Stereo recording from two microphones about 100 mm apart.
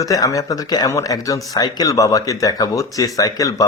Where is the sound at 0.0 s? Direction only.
35° left (ahead or behind).